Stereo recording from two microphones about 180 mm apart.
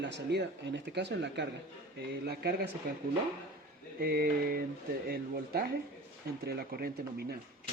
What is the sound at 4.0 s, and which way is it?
Speech, 55° right (ahead or behind).